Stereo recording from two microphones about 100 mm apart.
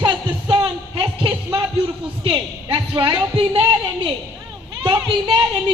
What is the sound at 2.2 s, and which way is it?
Speech, 55° right (ahead or behind).